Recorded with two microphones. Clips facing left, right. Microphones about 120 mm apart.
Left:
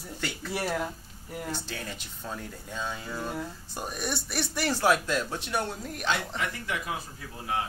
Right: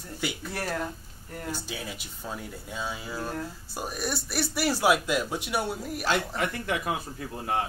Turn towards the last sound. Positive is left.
turn(degrees=-50)  # may be behind; listen again after turning